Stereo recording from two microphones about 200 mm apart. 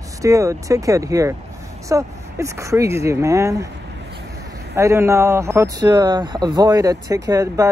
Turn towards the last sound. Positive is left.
turn(degrees=-15)  # may be behind; listen again after turning